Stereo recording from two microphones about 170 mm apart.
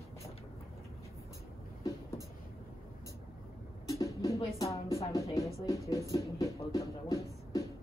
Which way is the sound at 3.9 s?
20° left (ahead or behind).